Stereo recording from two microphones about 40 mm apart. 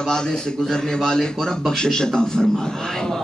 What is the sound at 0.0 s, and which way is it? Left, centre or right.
A man's voice, centre.